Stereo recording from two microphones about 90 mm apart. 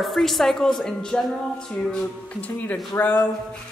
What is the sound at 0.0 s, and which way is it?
A woman's voice, centre (ahead or behind).